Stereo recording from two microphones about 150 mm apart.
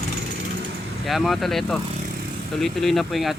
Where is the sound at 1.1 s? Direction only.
Centre (ahead or behind).